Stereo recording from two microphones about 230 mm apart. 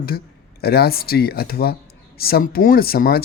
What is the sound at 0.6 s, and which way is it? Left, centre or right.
A man's voice, left.